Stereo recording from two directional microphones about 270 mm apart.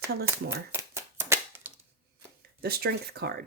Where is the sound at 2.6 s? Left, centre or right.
Right.